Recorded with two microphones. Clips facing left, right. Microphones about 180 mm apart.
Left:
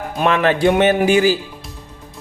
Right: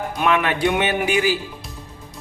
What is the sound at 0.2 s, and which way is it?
Speech, 35° left (ahead or behind).